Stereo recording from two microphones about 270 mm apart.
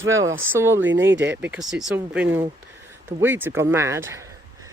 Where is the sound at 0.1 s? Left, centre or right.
Centre.